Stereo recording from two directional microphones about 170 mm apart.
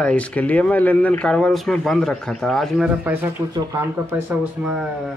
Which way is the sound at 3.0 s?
10° right (ahead or behind).